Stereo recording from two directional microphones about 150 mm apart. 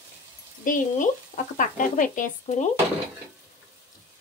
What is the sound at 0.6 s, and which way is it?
Speech, 60° left (ahead or behind).